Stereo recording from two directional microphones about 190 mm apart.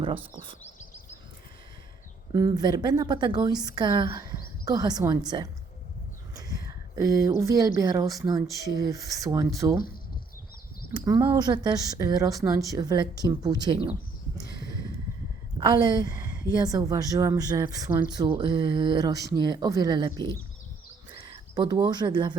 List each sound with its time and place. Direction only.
2.3 s a woman's voice: 20° right (ahead or behind)
6.3 s a sound: 20° right (ahead or behind)
7.8 s speech: 20° right (ahead or behind)
10.9 s a woman's voice: 20° right (ahead or behind)
15.5 s a woman's voice: 20° right (ahead or behind)